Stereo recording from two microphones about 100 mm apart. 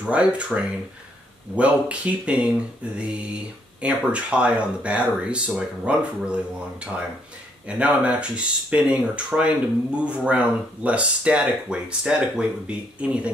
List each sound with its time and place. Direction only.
0.0 s speech: 10° right (ahead or behind)